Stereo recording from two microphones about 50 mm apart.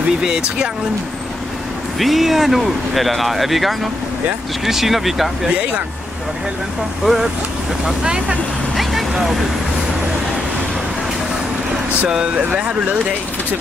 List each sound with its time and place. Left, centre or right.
0.2 s speech: centre
2.0 s speech: centre
7.0 s speech: centre
12.1 s speech: centre